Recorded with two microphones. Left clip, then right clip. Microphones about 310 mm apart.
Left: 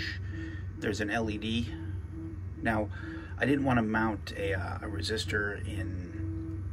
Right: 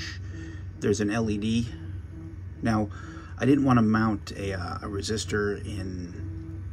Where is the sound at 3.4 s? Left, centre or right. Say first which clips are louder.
Right 5 dB; right.